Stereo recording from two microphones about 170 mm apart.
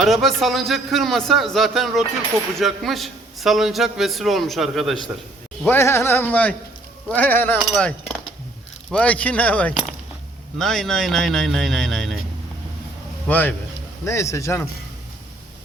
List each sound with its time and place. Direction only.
0.0 s a man's voice: centre (ahead or behind)
5.6 s a man's voice: 15° left (ahead or behind)
13.2 s a man's voice: 10° left (ahead or behind)